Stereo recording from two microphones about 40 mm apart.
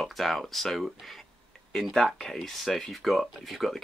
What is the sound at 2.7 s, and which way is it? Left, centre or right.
Speech, centre.